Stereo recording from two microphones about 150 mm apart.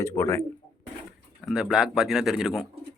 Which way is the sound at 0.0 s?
15° left (ahead or behind).